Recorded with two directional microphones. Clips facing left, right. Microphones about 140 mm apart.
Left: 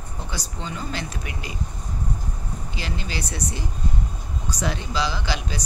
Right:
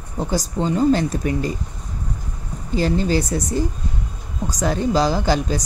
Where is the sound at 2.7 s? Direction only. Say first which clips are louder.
Right 14 dB; 40° right (ahead or behind).